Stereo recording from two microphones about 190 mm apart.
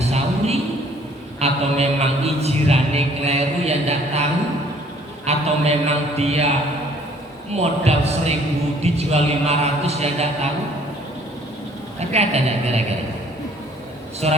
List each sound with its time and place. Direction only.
0.0 s a sound: 35° right (ahead or behind)
1.4 s mantra: 35° right (ahead or behind)
5.2 s a man's voice: 35° right (ahead or behind)
6.1 s mantra: 35° right (ahead or behind)
7.5 s mantra: 35° right (ahead or behind)
11.9 s mantra: 35° right (ahead or behind)
14.2 s mantra: 35° right (ahead or behind)